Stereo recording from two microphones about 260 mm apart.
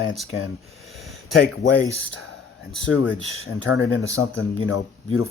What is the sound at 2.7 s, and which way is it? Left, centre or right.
Speech, left.